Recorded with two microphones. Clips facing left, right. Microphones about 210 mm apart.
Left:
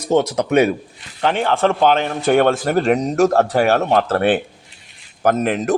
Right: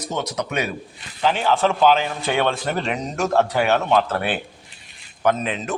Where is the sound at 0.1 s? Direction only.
55° left (ahead or behind).